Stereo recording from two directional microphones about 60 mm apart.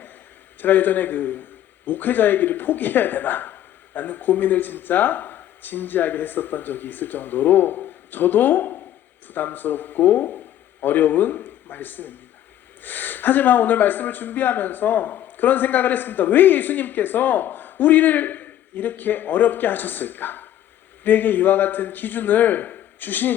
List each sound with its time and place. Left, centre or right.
0.6 s a man's voice: left